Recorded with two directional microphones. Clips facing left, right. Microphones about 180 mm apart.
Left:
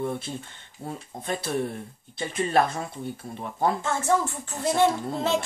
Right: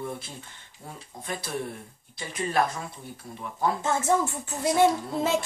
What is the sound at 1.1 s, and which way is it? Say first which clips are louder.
Speech: left 5 dB; 50° left (ahead or behind).